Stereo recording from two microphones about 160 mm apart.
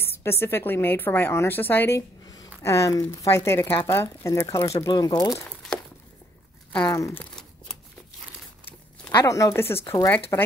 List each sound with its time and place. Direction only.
0.0 s a woman's voice: 15° left (ahead or behind)
5.3 s crumpling: 5° left (ahead or behind)
6.8 s speech: 20° left (ahead or behind)
9.1 s a woman's voice: 20° left (ahead or behind)